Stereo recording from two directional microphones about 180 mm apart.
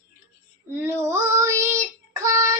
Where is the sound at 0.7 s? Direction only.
15° right (ahead or behind).